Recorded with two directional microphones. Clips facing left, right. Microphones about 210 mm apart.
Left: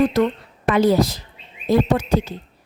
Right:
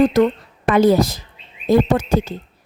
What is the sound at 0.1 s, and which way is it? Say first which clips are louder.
Speech: right 3 dB; 45° right (ahead or behind).